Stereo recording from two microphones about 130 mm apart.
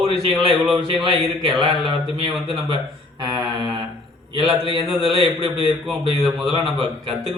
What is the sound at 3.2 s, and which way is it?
Mantra, 35° right (ahead or behind).